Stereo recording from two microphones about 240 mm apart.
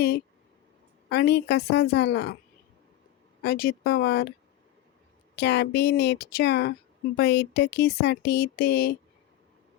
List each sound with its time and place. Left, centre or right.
1.1 s speech: left
3.4 s speech: left
5.4 s speech: left